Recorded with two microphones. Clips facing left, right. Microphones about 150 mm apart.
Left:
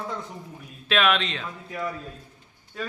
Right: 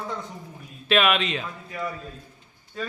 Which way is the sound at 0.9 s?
5° right (ahead or behind).